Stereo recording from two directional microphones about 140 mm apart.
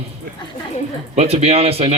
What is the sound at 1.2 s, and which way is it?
Speech, 45° right (ahead or behind).